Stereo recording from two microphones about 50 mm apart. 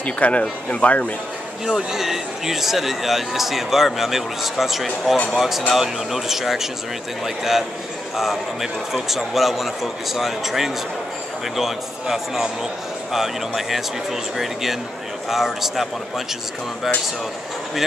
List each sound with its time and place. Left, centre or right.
0.0 s speech: left
1.7 s a man's voice: centre